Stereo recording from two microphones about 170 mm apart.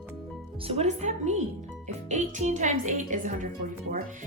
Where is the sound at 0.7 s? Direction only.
40° right (ahead or behind).